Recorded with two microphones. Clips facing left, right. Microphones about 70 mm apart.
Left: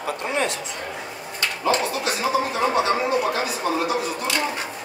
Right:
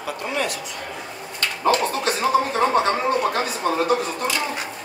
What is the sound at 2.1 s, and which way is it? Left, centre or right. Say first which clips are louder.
Speech: right 3 dB; right.